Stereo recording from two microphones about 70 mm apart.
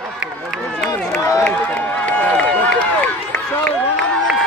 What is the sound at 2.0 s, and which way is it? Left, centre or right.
Run, left.